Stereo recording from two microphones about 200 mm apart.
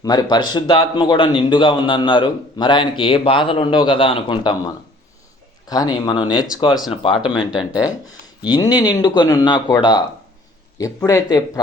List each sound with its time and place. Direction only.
0.0 s a man's voice: 20° left (ahead or behind)
6.7 s speech: centre (ahead or behind)
8.4 s a man's voice: 20° left (ahead or behind)